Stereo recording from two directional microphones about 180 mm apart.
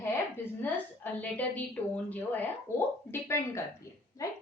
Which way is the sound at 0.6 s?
10° left (ahead or behind).